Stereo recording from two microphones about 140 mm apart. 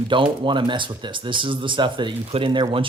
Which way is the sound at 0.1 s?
35° right (ahead or behind).